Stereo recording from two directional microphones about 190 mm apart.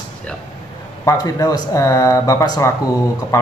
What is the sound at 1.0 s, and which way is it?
Speech, 20° left (ahead or behind).